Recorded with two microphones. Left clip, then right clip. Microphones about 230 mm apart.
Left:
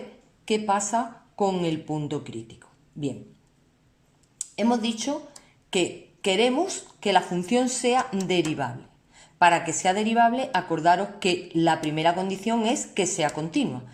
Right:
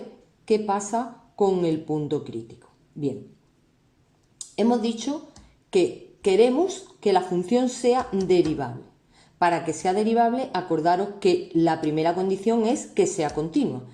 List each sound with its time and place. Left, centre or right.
0.4 s a woman's voice: left
4.5 s a woman's voice: left